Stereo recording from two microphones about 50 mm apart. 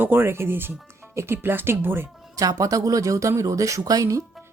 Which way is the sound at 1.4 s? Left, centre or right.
Right.